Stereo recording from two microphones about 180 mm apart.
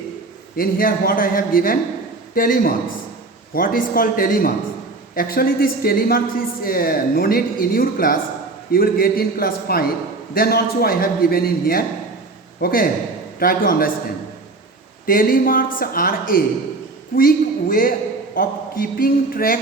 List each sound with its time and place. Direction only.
0.5 s a man's voice: 55° left (ahead or behind)
15.0 s speech: 50° left (ahead or behind)